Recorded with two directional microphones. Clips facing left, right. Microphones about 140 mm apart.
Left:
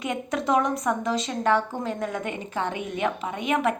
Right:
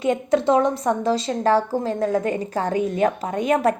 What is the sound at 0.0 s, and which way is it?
A woman's voice, 30° right (ahead or behind).